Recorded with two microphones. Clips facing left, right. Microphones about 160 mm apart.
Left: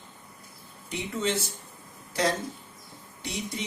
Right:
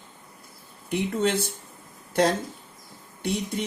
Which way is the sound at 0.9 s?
55° right (ahead or behind).